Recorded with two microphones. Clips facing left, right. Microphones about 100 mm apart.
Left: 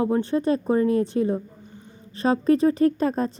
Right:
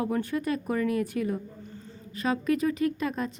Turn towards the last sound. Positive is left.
turn(degrees=35)  # may be behind; listen again after turning